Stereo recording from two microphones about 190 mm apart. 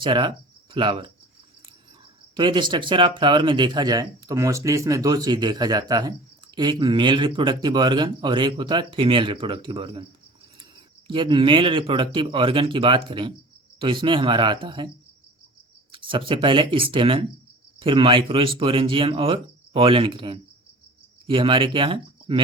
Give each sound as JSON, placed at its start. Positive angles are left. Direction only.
{"t": 0.0, "sound": "speech", "side_deg": -25}
{"t": 2.3, "sound": "speech", "side_deg": -25}
{"t": 11.1, "sound": "speech", "side_deg": -25}
{"t": 15.9, "sound": "speech", "side_deg": -25}